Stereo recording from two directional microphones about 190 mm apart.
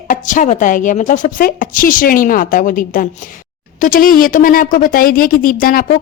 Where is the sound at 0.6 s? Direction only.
45° left (ahead or behind).